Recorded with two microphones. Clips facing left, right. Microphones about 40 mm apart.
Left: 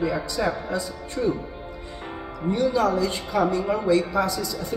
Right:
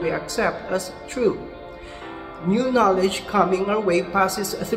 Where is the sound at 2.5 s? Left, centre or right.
Right.